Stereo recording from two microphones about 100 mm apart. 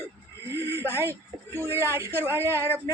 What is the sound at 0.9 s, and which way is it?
A woman's voice, 25° right (ahead or behind).